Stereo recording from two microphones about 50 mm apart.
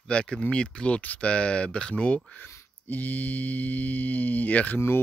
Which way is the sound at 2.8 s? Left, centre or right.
Left.